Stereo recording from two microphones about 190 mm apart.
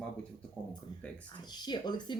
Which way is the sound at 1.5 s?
20° left (ahead or behind).